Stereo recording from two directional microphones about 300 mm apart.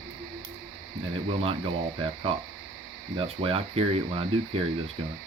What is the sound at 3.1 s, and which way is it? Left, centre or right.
Speech, centre.